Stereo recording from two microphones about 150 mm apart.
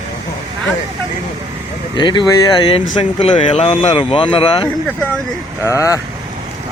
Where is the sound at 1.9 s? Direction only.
30° left (ahead or behind).